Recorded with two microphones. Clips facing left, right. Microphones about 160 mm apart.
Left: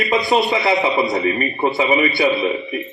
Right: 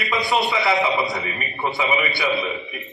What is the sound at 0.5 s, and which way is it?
Speech, 20° left (ahead or behind).